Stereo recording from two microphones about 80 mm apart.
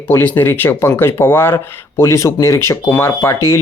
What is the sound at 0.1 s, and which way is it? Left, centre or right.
Speech, left.